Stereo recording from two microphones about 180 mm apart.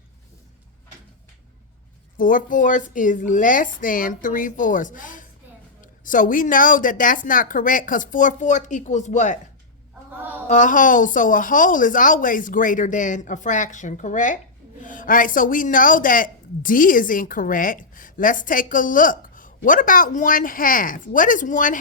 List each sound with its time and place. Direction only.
2.1 s a woman's voice: 50° left (ahead or behind)
10.5 s a woman's voice: 45° left (ahead or behind)